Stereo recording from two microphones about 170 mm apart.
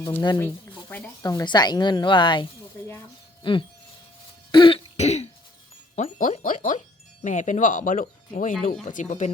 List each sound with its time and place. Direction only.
0.3 s speech: 10° left (ahead or behind)
1.2 s speech: 25° left (ahead or behind)
3.4 s a sound: 30° left (ahead or behind)
4.5 s throat clearing: 30° left (ahead or behind)
6.0 s speech: 45° left (ahead or behind)